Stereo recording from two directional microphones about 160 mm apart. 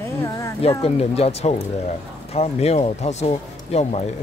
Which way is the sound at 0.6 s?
40° left (ahead or behind).